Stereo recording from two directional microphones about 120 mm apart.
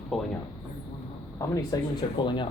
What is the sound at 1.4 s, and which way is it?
Speech, 30° left (ahead or behind).